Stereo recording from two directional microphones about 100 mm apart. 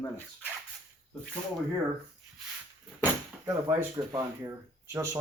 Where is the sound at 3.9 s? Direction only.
40° right (ahead or behind).